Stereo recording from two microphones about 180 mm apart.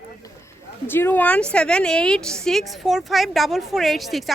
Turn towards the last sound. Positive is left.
turn(degrees=0)  # may be behind; listen again after turning